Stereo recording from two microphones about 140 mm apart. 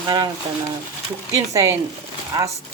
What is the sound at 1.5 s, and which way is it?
Speech, 25° right (ahead or behind).